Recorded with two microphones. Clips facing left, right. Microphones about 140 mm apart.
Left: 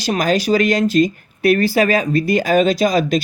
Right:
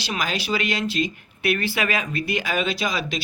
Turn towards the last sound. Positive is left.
turn(degrees=45)  # may be behind; listen again after turning